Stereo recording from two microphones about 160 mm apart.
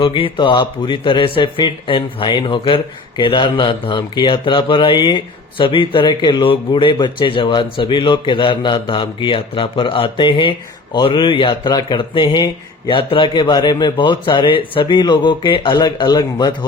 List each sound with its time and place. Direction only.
0.0 s a man's voice: 35° left (ahead or behind)